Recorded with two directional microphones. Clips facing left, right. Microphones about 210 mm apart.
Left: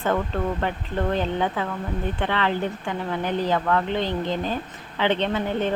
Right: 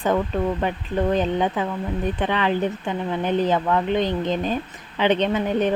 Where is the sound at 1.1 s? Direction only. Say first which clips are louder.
Right 2 dB; 15° right (ahead or behind).